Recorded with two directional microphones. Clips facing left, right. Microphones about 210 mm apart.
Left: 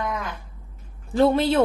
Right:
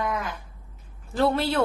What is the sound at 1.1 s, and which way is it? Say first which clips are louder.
Speech: left 5 dB; 20° left (ahead or behind).